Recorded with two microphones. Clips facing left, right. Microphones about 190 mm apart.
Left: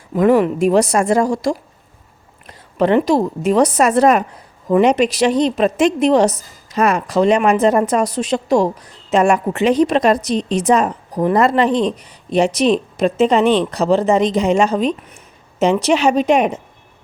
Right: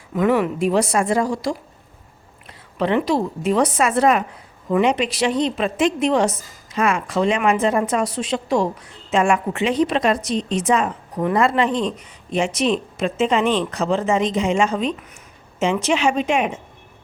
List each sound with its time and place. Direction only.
0.1 s a woman's voice: 40° left (ahead or behind)